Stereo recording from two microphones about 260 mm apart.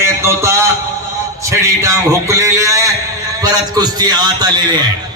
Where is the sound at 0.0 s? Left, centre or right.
Centre.